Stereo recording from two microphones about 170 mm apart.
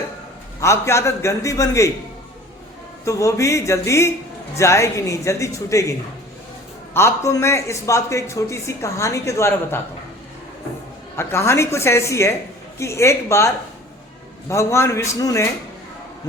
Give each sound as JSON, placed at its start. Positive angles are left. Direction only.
{"t": 0.6, "sound": "speech", "side_deg": 15}
{"t": 3.0, "sound": "speech", "side_deg": 20}
{"t": 6.9, "sound": "speech", "side_deg": 15}
{"t": 11.2, "sound": "speech", "side_deg": 15}
{"t": 14.5, "sound": "speech", "side_deg": 15}